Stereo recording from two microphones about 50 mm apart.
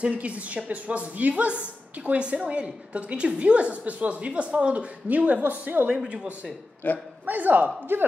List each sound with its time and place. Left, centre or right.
0.0 s a woman's voice: right
5.9 s a woman's voice: centre
6.8 s speech: left
7.2 s speech: right